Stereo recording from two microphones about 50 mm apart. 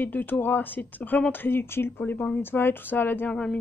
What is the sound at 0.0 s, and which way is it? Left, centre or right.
Speech, left.